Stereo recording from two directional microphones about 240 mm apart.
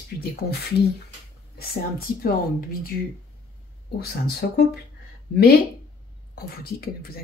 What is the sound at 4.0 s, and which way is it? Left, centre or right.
Speech, left.